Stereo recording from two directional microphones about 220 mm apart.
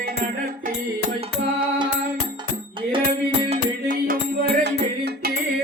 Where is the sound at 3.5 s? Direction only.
40° right (ahead or behind).